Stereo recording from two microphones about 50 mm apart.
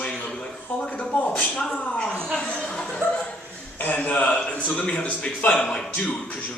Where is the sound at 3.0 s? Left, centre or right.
Right.